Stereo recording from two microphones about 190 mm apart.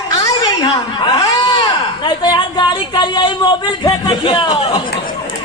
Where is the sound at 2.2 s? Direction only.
20° left (ahead or behind).